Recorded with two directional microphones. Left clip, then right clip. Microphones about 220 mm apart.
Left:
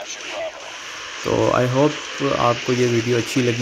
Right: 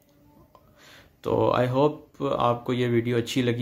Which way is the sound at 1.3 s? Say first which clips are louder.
Left 4 dB; 25° left (ahead or behind).